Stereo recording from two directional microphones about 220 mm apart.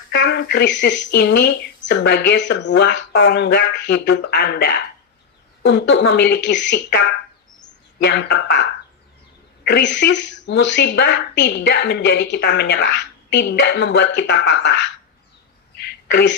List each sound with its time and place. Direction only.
0.1 s a woman's voice: 45° left (ahead or behind)
9.6 s a woman's voice: 55° left (ahead or behind)
15.8 s throat clearing: 50° left (ahead or behind)